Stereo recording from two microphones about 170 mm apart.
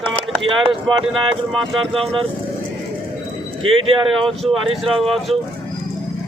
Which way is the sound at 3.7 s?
30° right (ahead or behind).